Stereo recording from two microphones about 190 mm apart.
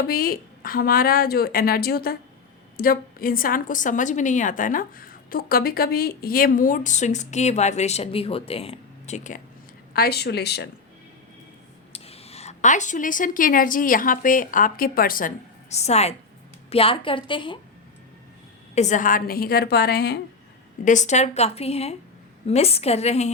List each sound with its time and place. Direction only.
0.0 s a woman's voice: 50° left (ahead or behind)
9.9 s speech: 55° left (ahead or behind)
11.9 s speech: 30° left (ahead or behind); by 15.3 s 50° left (ahead or behind)
15.7 s a woman's voice: 35° left (ahead or behind)
18.7 s a woman's voice: 40° left (ahead or behind); by 20.1 s 60° left (ahead or behind)
20.8 s a woman's voice: 40° left (ahead or behind)